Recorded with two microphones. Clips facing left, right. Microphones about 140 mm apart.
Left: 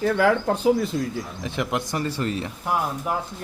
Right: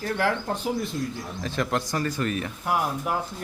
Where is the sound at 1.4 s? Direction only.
15° left (ahead or behind).